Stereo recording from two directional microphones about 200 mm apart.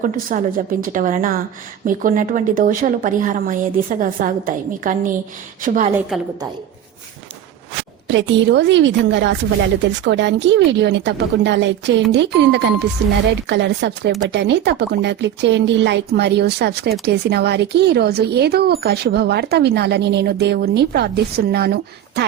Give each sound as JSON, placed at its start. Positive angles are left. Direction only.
{"t": 0.0, "sound": "a woman's voice", "side_deg": -45}
{"t": 6.1, "sound": "a woman's voice", "side_deg": 0}
{"t": 8.0, "sound": "speech", "side_deg": -65}